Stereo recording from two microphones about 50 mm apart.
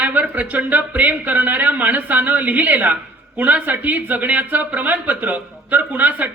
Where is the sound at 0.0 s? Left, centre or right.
Right.